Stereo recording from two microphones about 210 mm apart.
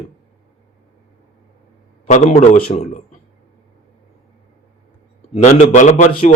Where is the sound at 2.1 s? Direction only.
35° left (ahead or behind).